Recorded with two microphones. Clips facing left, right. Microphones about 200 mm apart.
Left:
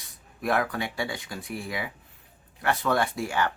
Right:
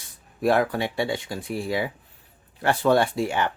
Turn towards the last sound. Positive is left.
turn(degrees=-20)  # may be behind; listen again after turning